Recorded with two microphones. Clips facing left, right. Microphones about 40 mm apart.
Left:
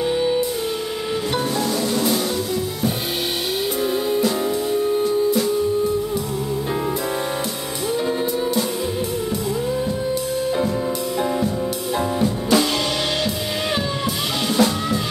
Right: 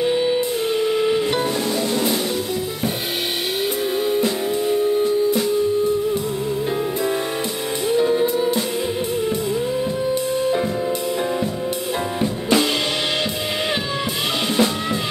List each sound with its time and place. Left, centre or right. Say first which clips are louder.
0.0 s music: right 1 dB; centre
7.9 s music: right 4 dB; centre
12.2 s drum kit: even; right
14.6 s music: left 1 dB; right